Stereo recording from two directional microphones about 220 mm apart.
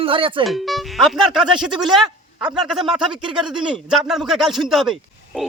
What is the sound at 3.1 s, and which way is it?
Speech, 20° right (ahead or behind).